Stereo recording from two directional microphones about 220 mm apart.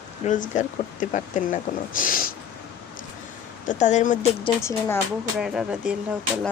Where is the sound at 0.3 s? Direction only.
35° left (ahead or behind).